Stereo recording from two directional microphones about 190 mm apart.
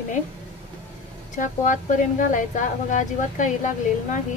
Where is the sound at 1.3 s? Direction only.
40° left (ahead or behind).